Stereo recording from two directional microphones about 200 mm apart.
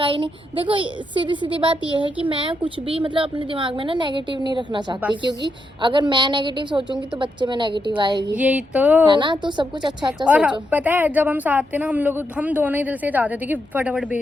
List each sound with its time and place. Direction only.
0.0 s a woman's voice: 25° right (ahead or behind)
8.4 s a woman's voice: 5° right (ahead or behind)
9.0 s a woman's voice: 25° right (ahead or behind)
10.2 s a woman's voice: 5° right (ahead or behind)